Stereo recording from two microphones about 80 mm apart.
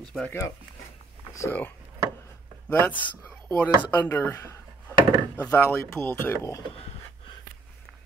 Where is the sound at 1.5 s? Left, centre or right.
Left.